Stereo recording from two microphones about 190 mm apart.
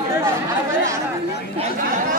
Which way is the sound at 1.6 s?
45° right (ahead or behind).